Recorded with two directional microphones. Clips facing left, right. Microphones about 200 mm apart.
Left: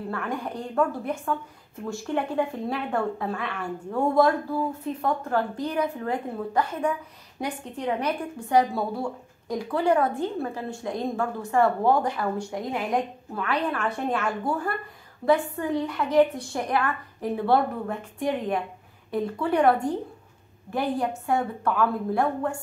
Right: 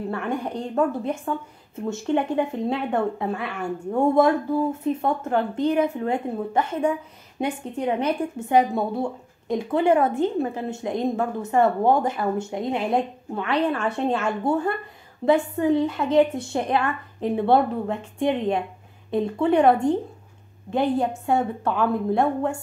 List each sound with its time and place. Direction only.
0.1 s a woman's voice: 25° right (ahead or behind)